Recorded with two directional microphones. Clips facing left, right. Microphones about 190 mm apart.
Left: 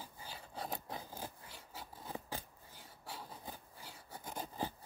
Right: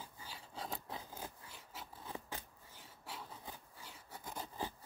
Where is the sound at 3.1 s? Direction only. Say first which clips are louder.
Left 1 dB; 35° left (ahead or behind).